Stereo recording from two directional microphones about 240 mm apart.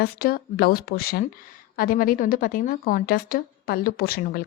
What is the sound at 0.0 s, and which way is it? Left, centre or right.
A woman's voice, left.